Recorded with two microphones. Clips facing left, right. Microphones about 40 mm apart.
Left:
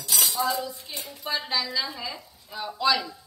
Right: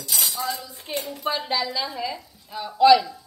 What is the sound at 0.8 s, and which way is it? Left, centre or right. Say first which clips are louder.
Speech: right 8 dB; right.